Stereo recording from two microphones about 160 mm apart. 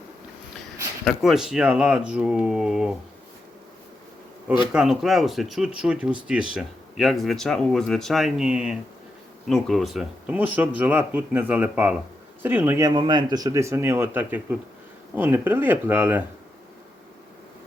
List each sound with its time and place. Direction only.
1.0 s speech: centre (ahead or behind)
4.7 s speech: 5° right (ahead or behind)
12.9 s speech: 30° right (ahead or behind); by 16.2 s 15° right (ahead or behind)